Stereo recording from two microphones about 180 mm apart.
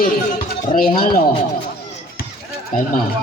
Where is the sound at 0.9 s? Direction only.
55° left (ahead or behind).